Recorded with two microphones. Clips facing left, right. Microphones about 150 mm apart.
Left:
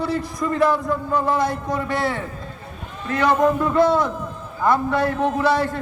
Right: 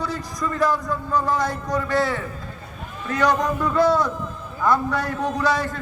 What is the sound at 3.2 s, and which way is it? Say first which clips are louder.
A man's voice: left 3 dB; 25° left (ahead or behind).